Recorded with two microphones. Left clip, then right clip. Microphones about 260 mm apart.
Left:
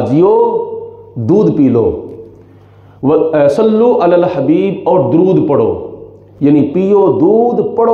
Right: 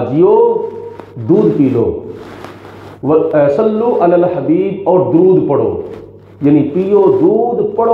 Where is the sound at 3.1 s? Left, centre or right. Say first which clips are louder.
Left 1 dB; left.